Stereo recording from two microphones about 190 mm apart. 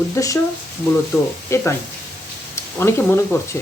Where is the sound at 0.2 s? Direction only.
15° left (ahead or behind).